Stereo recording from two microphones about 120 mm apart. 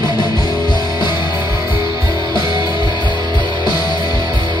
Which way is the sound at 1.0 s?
40° left (ahead or behind).